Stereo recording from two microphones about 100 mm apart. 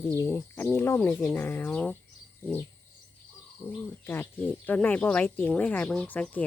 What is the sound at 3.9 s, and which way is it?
Speech, 20° left (ahead or behind).